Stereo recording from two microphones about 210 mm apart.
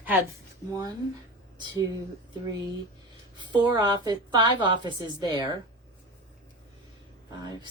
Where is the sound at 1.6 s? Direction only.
20° right (ahead or behind).